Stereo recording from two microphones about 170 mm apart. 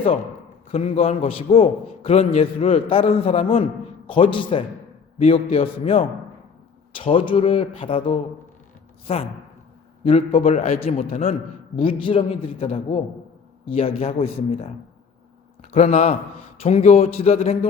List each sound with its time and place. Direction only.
0.7 s a man's voice: 35° left (ahead or behind)
15.7 s a man's voice: 40° left (ahead or behind)